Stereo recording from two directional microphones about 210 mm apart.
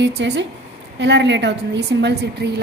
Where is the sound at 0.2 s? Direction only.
55° right (ahead or behind).